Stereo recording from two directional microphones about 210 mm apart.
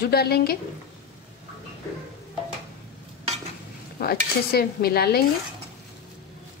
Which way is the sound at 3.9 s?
45° left (ahead or behind).